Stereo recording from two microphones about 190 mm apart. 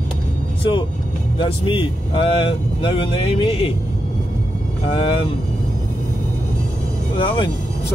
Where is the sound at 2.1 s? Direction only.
25° left (ahead or behind).